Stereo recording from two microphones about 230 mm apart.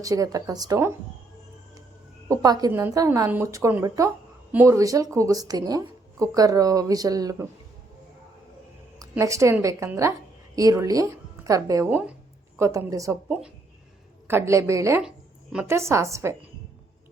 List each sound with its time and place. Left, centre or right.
0.0 s a woman's voice: centre
2.3 s a woman's voice: centre
9.0 s a woman's voice: centre